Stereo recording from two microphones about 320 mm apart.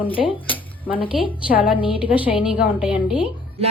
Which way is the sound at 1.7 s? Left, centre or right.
Centre.